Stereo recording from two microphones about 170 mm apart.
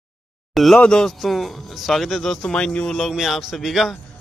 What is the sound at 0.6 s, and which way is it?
Speech, 5° left (ahead or behind).